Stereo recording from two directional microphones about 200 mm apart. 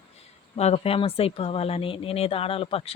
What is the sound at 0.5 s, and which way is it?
Speech, 30° left (ahead or behind).